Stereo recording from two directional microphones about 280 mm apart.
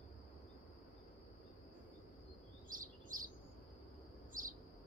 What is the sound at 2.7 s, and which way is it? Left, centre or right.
Chirp, right.